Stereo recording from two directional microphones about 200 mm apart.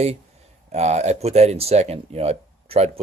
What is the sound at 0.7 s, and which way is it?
Speech, 35° right (ahead or behind).